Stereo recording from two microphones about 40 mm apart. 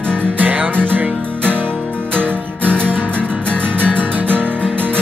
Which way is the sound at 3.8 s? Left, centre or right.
Right.